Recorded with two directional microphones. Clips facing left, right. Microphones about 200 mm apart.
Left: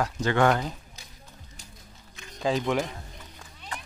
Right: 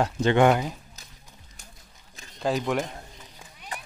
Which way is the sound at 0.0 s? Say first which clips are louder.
Right 3 dB; 20° right (ahead or behind).